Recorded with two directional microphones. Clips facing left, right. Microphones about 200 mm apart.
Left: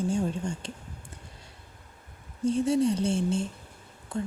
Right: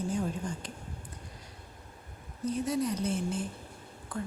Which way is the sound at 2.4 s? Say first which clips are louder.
Left 6 dB; 30° left (ahead or behind).